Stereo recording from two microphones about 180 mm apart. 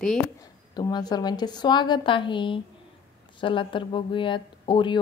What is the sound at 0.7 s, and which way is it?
A woman's voice, 20° left (ahead or behind).